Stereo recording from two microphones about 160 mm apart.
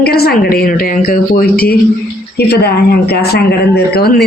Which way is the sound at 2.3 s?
90° left.